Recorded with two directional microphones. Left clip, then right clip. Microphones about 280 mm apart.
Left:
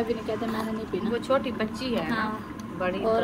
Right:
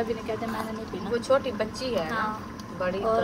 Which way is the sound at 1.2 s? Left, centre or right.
Right.